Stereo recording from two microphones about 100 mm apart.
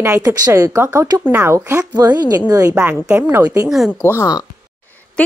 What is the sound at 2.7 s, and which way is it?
Speech, 15° right (ahead or behind).